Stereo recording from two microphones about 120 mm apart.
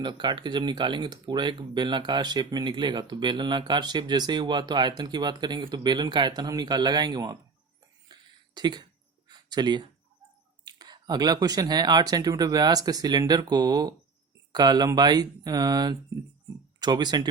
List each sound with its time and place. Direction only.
0.0 s speech: 40° right (ahead or behind)
8.0 s a sound: 35° right (ahead or behind)
10.7 s speech: 35° right (ahead or behind)